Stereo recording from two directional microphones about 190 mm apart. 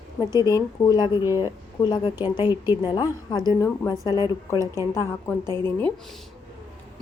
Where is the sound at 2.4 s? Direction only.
10° right (ahead or behind).